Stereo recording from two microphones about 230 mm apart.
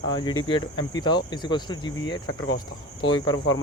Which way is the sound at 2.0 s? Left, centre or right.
Left.